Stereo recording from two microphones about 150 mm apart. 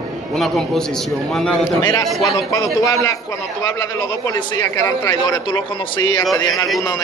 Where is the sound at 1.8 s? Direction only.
25° left (ahead or behind).